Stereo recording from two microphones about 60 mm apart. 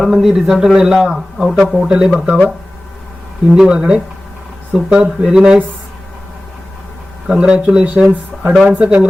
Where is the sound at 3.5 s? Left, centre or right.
Centre.